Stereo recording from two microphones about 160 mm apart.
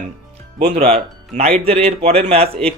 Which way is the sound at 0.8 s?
40° right (ahead or behind).